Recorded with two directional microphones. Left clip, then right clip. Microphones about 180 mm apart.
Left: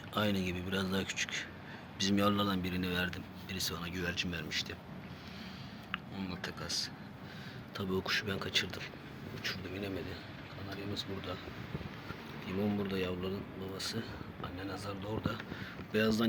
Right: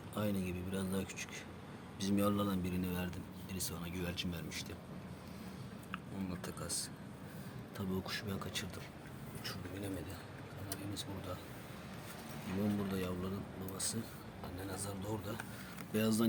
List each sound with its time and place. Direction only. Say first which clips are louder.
0.1 s a man's voice: left 6 dB; centre (ahead or behind)
5.9 s speech: left 4 dB; 20° right (ahead or behind)
7.8 s a man's voice: left 8 dB; centre (ahead or behind)
12.9 s speech: left 4 dB; 10° right (ahead or behind)